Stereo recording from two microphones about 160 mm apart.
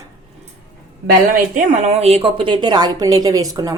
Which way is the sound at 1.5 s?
40° right (ahead or behind).